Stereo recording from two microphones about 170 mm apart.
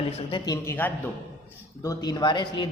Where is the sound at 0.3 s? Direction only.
25° left (ahead or behind).